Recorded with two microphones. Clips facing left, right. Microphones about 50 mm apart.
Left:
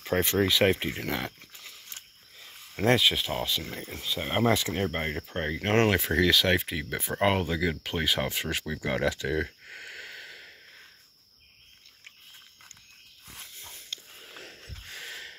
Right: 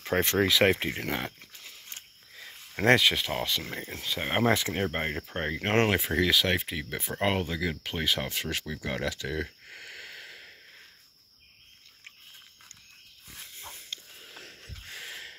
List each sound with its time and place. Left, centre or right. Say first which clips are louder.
0.1 s speech: even; right
0.5 s speech: even; right
1.0 s speech: even; centre
2.7 s speech: right 2 dB; right
3.0 s speech: even; right
3.6 s speech: right 1 dB; right
4.2 s speech: even; right
4.7 s speech: even; centre
6.0 s speech: left 2 dB; centre; by 9.8 s left
9.8 s a sound: left 1 dB; centre
10.2 s a sound: left 1 dB; centre
13.6 s dog: right 1 dB; right
14.9 s a sound: left 1 dB; centre